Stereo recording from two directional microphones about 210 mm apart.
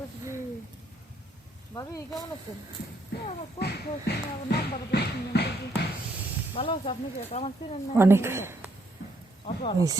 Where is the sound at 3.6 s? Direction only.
50° left (ahead or behind).